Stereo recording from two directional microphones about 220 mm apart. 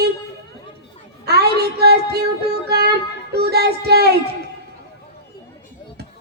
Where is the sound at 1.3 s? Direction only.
45° right (ahead or behind).